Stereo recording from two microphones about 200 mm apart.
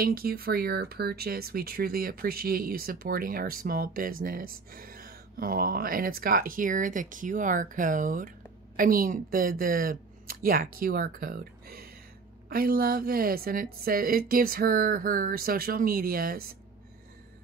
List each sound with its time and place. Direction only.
0.0 s speech: 50° right (ahead or behind)